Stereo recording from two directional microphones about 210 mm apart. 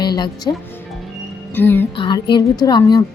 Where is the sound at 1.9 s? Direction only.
20° left (ahead or behind).